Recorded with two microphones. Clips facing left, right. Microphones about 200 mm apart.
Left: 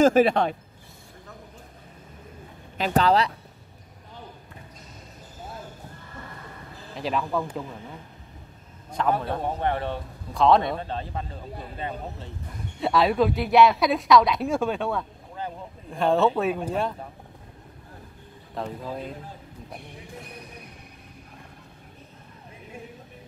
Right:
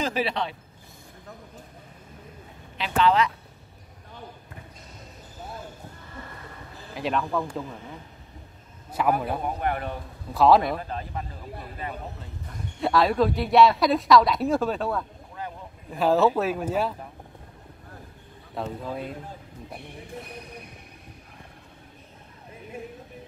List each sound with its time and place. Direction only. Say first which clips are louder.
0.0 s speech: left 9 dB; 50° left (ahead or behind)
2.8 s speech: left 1 dB; 40° left (ahead or behind)
6.9 s a woman's voice: even; centre (ahead or behind)
9.0 s a man's voice: right 1 dB; 10° right (ahead or behind)
9.4 s speech: left 2 dB; 30° left (ahead or behind)
10.3 s a woman's voice: right 1 dB; 5° right (ahead or behind)
10.8 s speech: left 2 dB; 30° left (ahead or behind)
12.8 s a woman's voice: even; centre (ahead or behind)
18.5 s a woman's voice: right 1 dB; 5° right (ahead or behind)